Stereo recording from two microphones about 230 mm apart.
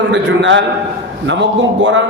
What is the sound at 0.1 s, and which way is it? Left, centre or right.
A man's voice, right.